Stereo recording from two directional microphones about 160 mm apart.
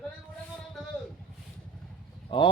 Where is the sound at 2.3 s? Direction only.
30° left (ahead or behind).